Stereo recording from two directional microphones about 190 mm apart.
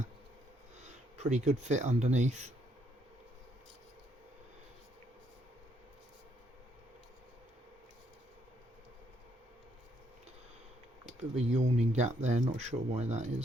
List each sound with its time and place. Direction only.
0.8 s speech: 35° right (ahead or behind)
11.2 s speech: 35° right (ahead or behind)